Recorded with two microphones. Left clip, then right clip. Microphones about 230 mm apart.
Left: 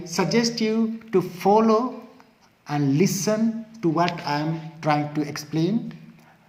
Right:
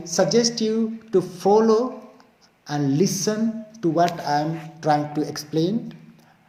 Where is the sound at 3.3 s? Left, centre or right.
Left.